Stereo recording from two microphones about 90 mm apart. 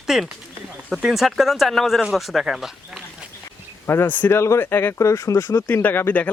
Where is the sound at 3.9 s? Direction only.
25° left (ahead or behind).